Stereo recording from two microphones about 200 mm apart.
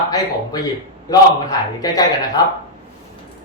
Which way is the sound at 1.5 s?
20° left (ahead or behind).